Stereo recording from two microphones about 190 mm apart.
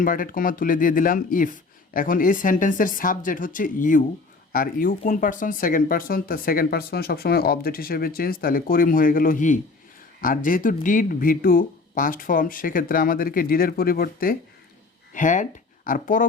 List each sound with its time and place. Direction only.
0.0 s speech: 45° left (ahead or behind)